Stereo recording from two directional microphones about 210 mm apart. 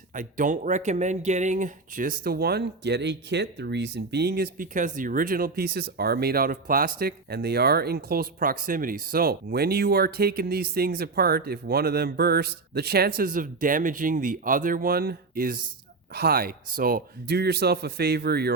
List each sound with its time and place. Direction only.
0.1 s speech: 40° right (ahead or behind)